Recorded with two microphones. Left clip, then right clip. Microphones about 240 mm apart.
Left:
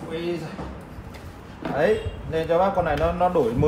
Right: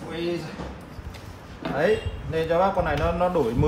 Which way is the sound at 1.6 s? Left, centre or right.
Centre.